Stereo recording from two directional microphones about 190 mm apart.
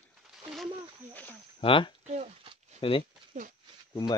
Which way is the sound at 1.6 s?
25° left (ahead or behind).